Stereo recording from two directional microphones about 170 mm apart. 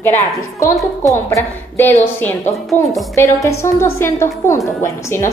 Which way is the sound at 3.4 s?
15° left (ahead or behind).